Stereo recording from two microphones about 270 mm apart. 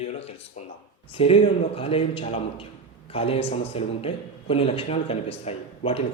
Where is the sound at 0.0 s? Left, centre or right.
Left.